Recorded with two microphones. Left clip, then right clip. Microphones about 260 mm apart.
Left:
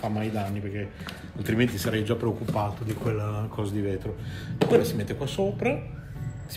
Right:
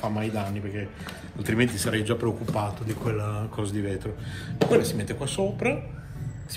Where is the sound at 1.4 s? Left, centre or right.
Right.